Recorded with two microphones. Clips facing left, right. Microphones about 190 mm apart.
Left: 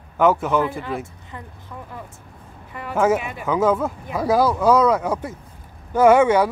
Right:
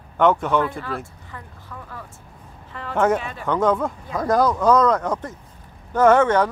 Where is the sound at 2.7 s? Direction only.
10° left (ahead or behind).